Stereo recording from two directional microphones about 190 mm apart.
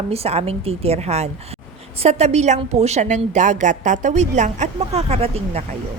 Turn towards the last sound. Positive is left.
turn(degrees=-35)  # may be behind; listen again after turning